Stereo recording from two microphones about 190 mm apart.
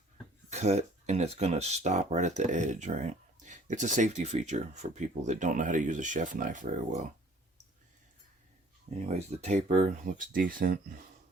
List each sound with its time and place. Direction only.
0.5 s speech: 35° right (ahead or behind)
9.0 s speech: 35° right (ahead or behind)